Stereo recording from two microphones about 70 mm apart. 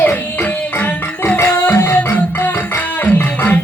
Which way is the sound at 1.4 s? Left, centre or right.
Left.